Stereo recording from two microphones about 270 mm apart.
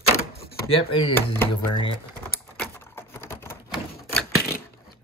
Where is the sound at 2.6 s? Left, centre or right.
Centre.